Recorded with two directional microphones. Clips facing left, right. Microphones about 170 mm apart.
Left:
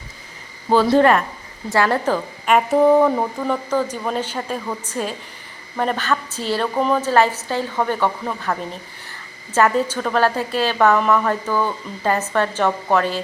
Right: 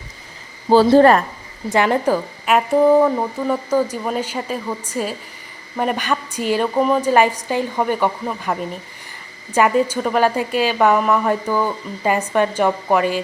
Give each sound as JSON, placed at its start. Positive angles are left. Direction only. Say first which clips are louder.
{"t": 0.7, "sound": "a woman's voice", "louder": "right 3 dB", "side_deg": -35}
{"t": 1.7, "sound": "a woman's voice", "louder": "right 2 dB", "side_deg": -15}